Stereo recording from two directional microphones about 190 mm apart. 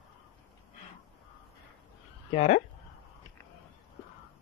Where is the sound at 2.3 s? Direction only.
40° left (ahead or behind).